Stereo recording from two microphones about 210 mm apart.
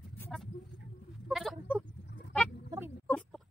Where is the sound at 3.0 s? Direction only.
10° left (ahead or behind).